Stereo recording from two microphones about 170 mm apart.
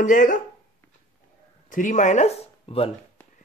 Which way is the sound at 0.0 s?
50° left (ahead or behind).